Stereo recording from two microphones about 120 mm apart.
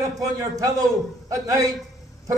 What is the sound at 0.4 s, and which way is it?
A man's voice, 30° right (ahead or behind).